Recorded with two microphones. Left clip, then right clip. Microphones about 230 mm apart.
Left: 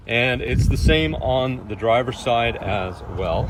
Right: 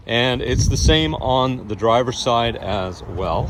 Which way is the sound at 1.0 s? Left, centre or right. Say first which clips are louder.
Right 3 dB; right.